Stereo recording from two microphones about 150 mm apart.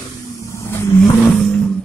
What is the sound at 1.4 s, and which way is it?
Vehicle, 5° left (ahead or behind).